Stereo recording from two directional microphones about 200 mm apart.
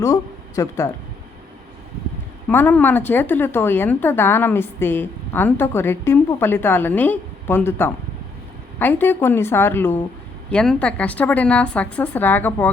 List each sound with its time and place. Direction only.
0.0 s a woman's voice: 15° left (ahead or behind)
2.5 s a woman's voice: 10° left (ahead or behind)